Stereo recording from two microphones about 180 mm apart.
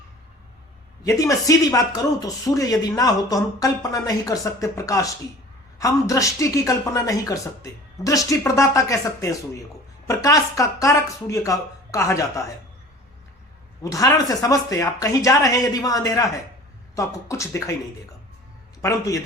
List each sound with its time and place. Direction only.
1.0 s speech: 20° left (ahead or behind)
13.8 s speech: 20° left (ahead or behind)
18.8 s a man's voice: 15° left (ahead or behind)